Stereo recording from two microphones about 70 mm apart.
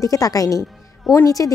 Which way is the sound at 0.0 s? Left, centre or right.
Left.